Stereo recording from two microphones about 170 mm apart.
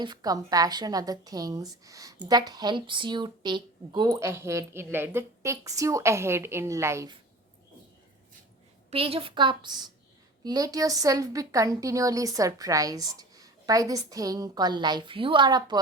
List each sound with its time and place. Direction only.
0.0 s a woman's voice: 25° right (ahead or behind)
8.9 s a woman's voice: 35° right (ahead or behind)